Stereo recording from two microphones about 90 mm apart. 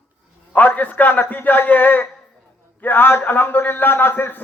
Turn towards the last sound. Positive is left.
turn(degrees=20)  # may be behind; listen again after turning